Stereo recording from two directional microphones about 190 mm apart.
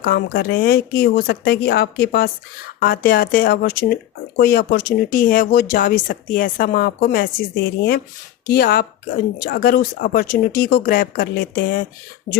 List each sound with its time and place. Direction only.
0.0 s speech: 55° left (ahead or behind)